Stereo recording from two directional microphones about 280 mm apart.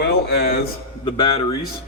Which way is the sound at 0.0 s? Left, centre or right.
Left.